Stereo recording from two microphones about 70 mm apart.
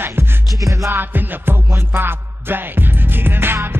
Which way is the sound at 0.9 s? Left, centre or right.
Right.